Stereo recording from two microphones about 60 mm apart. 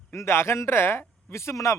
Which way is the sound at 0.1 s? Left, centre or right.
Left.